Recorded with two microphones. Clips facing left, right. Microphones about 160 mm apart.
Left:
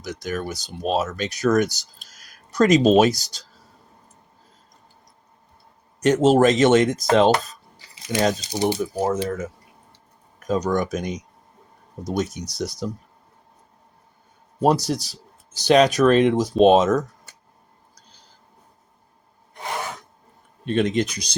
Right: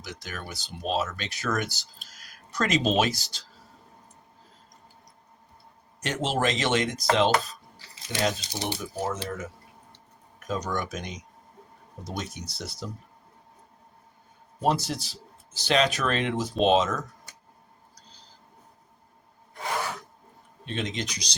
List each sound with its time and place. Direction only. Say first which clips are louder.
0.0 s speech: left 11 dB; 45° left (ahead or behind)
6.0 s speech: left 12 dB; 45° left (ahead or behind)
10.4 s speech: left 8 dB; 40° left (ahead or behind)
14.6 s speech: left 6 dB; 40° left (ahead or behind)
20.7 s speech: left 11 dB; 50° left (ahead or behind)